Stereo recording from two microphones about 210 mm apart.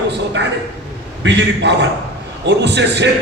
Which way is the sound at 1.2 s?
55° right (ahead or behind).